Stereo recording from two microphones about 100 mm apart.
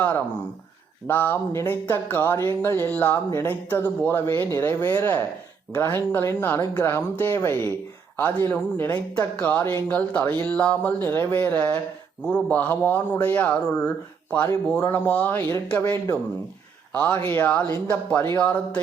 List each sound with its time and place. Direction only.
1.0 s a man's voice: 20° left (ahead or behind)
16.9 s a man's voice: 15° left (ahead or behind)